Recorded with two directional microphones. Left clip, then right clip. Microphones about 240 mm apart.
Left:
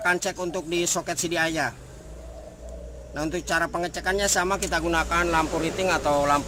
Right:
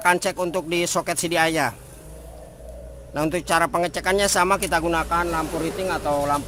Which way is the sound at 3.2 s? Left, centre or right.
Right.